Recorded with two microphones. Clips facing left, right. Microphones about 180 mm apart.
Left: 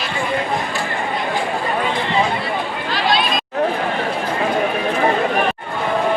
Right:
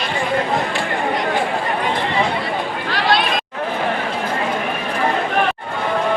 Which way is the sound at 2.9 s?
65° right (ahead or behind).